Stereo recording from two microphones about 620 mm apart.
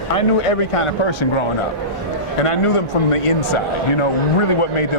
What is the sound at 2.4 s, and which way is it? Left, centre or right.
Speech, left.